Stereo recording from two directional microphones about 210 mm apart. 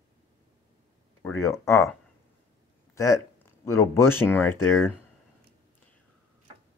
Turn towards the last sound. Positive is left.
turn(degrees=10)  # may be behind; listen again after turning